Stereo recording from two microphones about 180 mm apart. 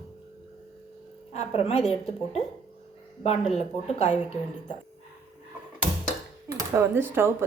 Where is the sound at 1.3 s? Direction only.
35° left (ahead or behind).